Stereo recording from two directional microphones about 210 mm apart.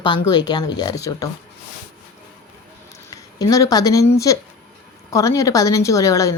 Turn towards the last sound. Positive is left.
turn(degrees=15)  # may be behind; listen again after turning